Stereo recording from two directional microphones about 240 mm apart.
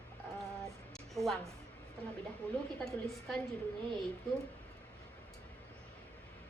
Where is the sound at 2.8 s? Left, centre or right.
Centre.